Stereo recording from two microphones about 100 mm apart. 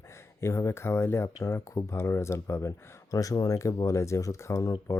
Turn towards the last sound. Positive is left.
turn(degrees=30)  # may be behind; listen again after turning